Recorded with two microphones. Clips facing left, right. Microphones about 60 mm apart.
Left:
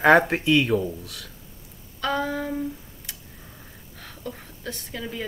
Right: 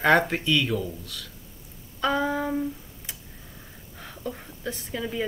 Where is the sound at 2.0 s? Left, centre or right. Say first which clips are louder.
Right 1 dB; centre.